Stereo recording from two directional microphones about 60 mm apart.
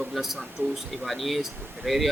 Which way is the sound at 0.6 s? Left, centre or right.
Right.